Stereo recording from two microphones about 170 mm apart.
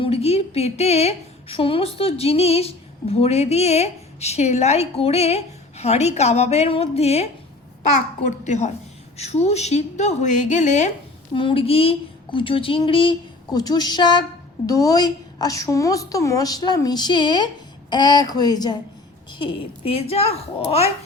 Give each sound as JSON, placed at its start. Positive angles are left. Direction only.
{"t": 0.0, "sound": "a woman's voice", "side_deg": 35}
{"t": 11.3, "sound": "a woman's voice", "side_deg": 30}